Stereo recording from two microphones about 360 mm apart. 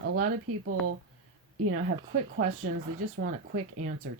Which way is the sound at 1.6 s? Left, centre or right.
Right.